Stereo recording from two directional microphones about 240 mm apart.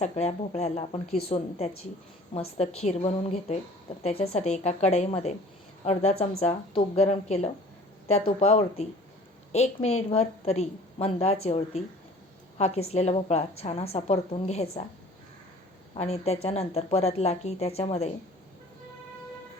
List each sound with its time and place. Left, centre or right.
0.0 s a woman's voice: left
1.0 s a woman's voice: left
1.3 s a woman's voice: left
16.0 s a woman's voice: left